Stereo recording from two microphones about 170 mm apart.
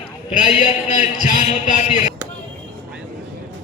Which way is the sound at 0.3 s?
45° left (ahead or behind).